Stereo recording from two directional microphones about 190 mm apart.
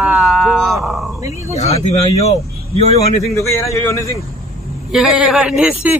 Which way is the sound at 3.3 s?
15° left (ahead or behind).